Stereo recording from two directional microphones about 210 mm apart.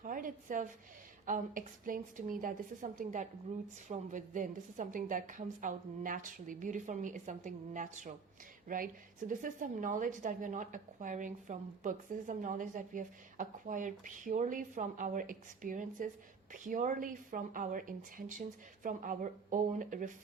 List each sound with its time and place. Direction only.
0.0 s a woman's voice: 40° right (ahead or behind)